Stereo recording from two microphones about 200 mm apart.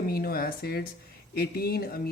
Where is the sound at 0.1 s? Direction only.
50° left (ahead or behind).